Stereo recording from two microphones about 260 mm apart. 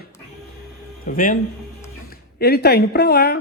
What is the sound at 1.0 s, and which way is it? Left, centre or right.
Speech, left.